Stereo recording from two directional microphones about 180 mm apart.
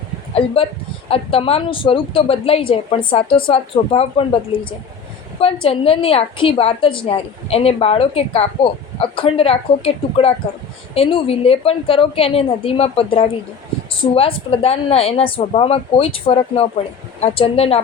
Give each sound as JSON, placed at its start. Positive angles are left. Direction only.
{"t": 0.3, "sound": "speech", "side_deg": 30}